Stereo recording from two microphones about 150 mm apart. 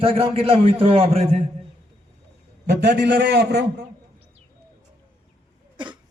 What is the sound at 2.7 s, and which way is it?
Speech, 90° right.